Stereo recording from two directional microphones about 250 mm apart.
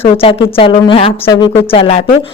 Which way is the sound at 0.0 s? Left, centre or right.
Left.